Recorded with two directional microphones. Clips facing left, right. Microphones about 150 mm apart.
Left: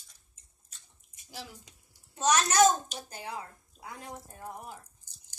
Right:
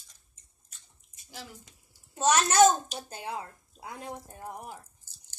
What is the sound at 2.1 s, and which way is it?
Speech, 25° right (ahead or behind).